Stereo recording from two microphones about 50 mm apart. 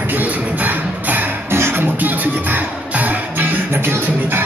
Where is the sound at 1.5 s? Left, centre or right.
Right.